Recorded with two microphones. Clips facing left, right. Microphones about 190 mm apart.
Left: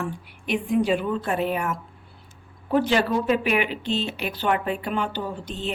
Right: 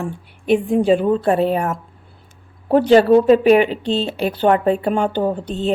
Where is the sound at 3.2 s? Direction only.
35° right (ahead or behind).